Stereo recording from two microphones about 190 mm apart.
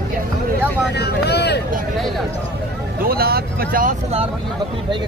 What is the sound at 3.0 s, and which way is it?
Speech, 55° right (ahead or behind).